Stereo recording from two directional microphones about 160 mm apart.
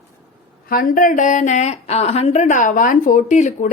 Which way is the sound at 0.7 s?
60° left (ahead or behind).